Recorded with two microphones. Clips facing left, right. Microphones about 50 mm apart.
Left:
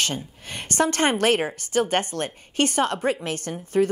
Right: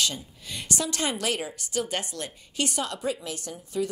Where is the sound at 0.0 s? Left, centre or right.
Left.